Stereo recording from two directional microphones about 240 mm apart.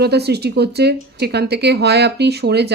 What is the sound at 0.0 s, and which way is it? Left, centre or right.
Speech, right.